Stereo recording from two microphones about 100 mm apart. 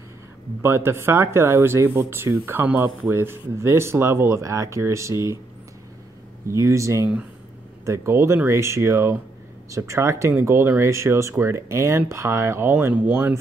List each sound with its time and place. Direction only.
0.6 s speech: 25° right (ahead or behind)
6.5 s speech: 30° right (ahead or behind)